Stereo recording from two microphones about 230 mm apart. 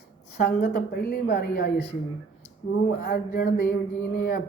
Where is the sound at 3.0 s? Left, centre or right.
Left.